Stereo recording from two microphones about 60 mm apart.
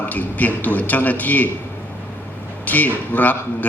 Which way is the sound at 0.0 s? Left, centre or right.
Left.